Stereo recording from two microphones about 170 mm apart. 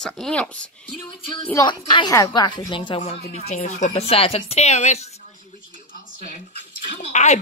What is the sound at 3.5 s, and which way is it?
Speech, 45° left (ahead or behind).